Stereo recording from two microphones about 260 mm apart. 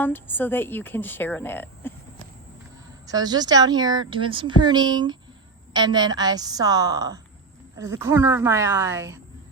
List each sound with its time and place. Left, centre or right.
0.0 s a woman's voice: centre
3.1 s speech: centre